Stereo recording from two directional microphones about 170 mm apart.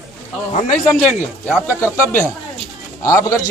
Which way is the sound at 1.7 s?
15° left (ahead or behind).